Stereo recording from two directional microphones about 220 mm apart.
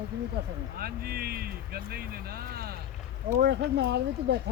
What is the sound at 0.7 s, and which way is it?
Speech, 45° right (ahead or behind).